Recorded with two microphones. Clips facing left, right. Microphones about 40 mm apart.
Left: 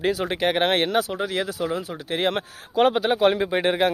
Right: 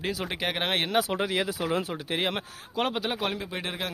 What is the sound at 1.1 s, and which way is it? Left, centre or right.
Speech, centre.